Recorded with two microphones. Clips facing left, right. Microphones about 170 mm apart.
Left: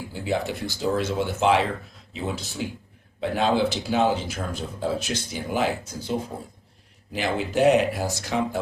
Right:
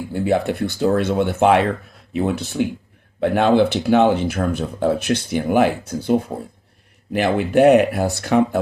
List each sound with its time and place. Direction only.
0.1 s speech: 60° right (ahead or behind)